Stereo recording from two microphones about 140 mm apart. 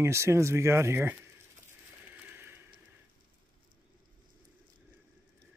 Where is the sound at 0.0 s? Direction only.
20° right (ahead or behind).